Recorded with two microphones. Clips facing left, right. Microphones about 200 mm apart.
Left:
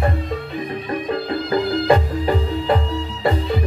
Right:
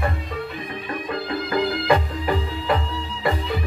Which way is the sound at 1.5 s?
30° left (ahead or behind).